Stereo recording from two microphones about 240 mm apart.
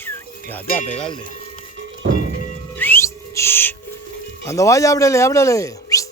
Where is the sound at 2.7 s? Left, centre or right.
Centre.